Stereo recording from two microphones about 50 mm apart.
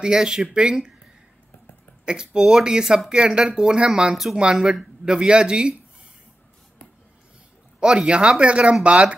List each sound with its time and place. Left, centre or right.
0.0 s speech: centre
2.0 s speech: centre
4.1 s speech: centre
7.8 s speech: centre